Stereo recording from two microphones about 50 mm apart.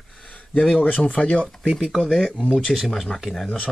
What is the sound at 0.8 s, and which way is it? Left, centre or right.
Speech, left.